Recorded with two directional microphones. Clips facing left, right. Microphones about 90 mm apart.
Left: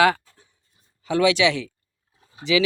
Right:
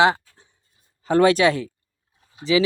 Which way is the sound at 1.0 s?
45° right (ahead or behind).